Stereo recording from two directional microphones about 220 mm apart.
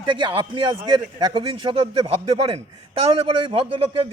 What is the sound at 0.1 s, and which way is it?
Speech, 20° right (ahead or behind).